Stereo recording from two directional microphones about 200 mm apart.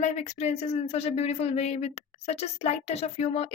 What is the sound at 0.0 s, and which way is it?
Speech, 35° left (ahead or behind).